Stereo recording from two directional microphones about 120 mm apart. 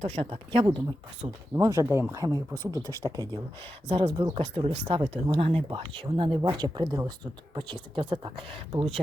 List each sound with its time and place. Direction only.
0.0 s speech: 55° right (ahead or behind)
1.5 s speech: 25° right (ahead or behind)
3.8 s speech: 45° right (ahead or behind); by 7.1 s 30° right (ahead or behind)
7.5 s speech: 45° right (ahead or behind)